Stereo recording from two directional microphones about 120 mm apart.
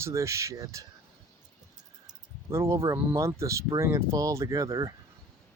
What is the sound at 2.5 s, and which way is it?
Speech, 25° right (ahead or behind).